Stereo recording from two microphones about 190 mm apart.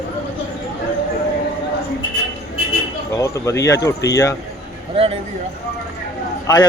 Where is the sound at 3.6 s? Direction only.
15° left (ahead or behind).